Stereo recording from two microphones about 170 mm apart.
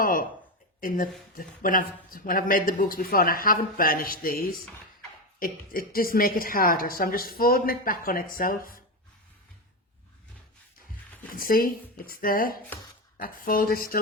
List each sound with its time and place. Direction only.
0.0 s a sound: 55° left (ahead or behind)
0.8 s a woman's voice: 50° left (ahead or behind)
11.3 s a woman's voice: 60° left (ahead or behind)